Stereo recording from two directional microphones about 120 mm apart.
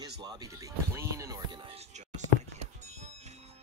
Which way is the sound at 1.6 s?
60° right (ahead or behind).